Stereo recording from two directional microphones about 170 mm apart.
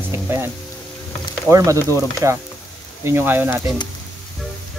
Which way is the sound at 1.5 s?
20° right (ahead or behind).